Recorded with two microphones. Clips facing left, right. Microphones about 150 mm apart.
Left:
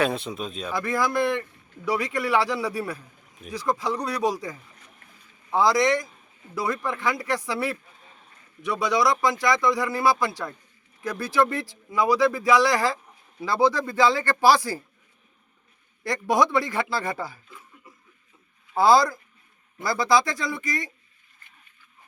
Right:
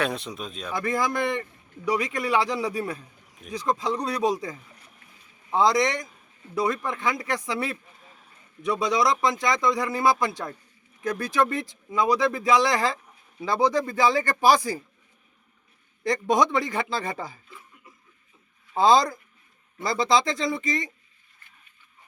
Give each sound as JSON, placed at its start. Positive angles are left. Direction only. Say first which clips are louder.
{"t": 0.0, "sound": "speech", "louder": "left 3 dB", "side_deg": 0}
{"t": 0.7, "sound": "speech", "louder": "even", "side_deg": -15}
{"t": 16.0, "sound": "speech", "louder": "even", "side_deg": -20}
{"t": 18.8, "sound": "speech", "louder": "left 1 dB", "side_deg": -20}